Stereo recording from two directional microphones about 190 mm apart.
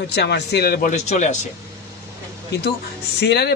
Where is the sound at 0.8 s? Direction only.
40° left (ahead or behind).